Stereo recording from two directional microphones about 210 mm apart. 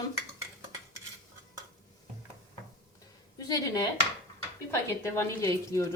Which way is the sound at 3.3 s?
15° left (ahead or behind).